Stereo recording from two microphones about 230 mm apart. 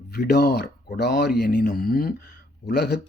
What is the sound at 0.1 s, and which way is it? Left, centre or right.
Speech, left.